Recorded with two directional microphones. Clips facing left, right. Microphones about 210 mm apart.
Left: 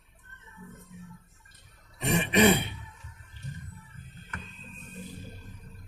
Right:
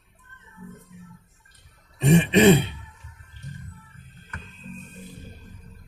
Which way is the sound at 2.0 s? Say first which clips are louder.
Right 6 dB; 25° right (ahead or behind).